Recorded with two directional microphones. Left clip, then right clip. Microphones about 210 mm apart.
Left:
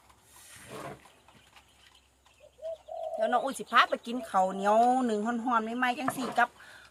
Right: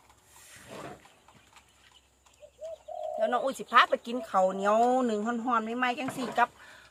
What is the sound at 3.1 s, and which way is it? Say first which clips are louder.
Speech: even; 10° right (ahead or behind).